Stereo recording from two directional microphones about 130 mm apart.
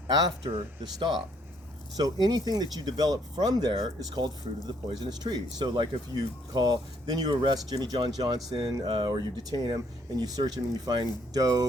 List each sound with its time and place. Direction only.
0.1 s speech: 30° right (ahead or behind)
2.0 s speech: 30° right (ahead or behind)